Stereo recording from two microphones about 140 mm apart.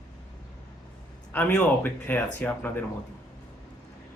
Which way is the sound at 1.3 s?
10° left (ahead or behind).